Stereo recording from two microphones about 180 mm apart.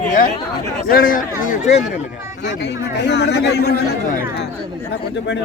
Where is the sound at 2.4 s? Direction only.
70° left (ahead or behind).